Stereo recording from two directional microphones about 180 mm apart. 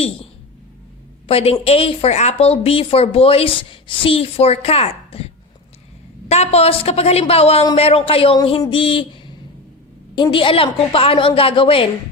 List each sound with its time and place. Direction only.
1.3 s a woman's voice: 35° left (ahead or behind)